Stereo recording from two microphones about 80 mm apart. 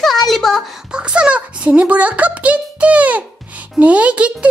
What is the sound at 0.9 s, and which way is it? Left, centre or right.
A child's voice, centre.